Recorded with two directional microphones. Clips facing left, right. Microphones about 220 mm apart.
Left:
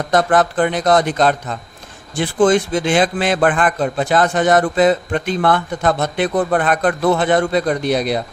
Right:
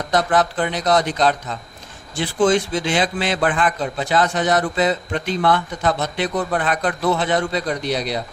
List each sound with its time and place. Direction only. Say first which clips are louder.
0.1 s a man's voice: left 4 dB; 50° left (ahead or behind)